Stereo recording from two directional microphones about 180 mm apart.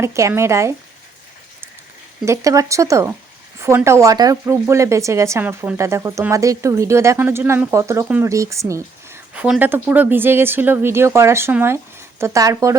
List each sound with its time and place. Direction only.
0.0 s speech: 15° right (ahead or behind)
2.2 s speech: 15° right (ahead or behind)